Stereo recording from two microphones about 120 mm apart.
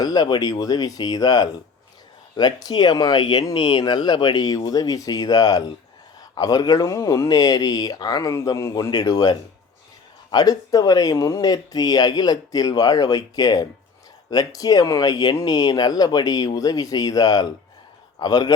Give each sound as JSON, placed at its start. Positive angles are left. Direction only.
{"t": 0.0, "sound": "speech", "side_deg": 35}